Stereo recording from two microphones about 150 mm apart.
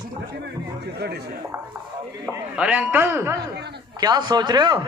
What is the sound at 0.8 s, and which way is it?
Speech, 90° right.